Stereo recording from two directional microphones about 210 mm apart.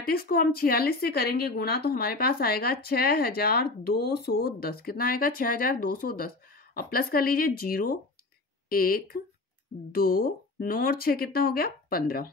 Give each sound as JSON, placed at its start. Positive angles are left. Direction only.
{"t": 0.0, "sound": "speech", "side_deg": 45}